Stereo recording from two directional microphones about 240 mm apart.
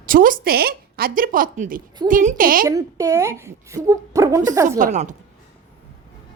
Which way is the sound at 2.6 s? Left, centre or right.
Centre.